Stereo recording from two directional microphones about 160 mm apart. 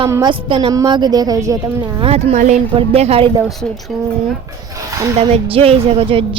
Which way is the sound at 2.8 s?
40° right (ahead or behind).